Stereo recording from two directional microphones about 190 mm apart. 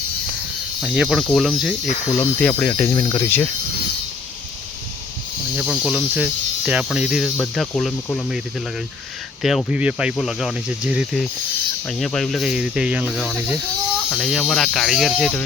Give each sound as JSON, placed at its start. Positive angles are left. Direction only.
{"t": 0.8, "sound": "speech", "side_deg": -5}
{"t": 2.1, "sound": "speech", "side_deg": 10}
{"t": 2.9, "sound": "speech", "side_deg": 25}
{"t": 5.5, "sound": "speech", "side_deg": -5}
{"t": 9.4, "sound": "speech", "side_deg": 0}